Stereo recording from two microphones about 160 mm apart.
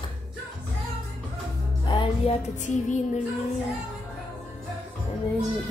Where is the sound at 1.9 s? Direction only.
30° left (ahead or behind).